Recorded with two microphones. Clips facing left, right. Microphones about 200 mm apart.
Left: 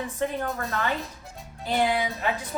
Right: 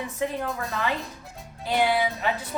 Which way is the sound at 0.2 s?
5° right (ahead or behind).